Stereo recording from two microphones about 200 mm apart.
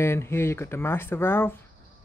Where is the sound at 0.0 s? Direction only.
10° left (ahead or behind).